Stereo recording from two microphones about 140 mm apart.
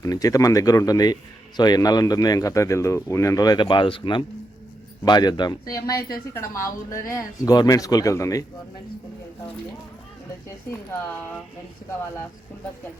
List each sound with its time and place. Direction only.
0.0 s a man's voice: 25° left (ahead or behind)